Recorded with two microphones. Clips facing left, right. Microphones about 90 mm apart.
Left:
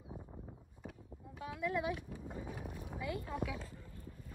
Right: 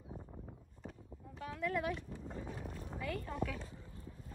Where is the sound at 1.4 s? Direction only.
15° left (ahead or behind).